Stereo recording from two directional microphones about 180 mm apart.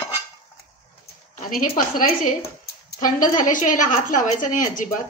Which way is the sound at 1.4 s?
50° left (ahead or behind).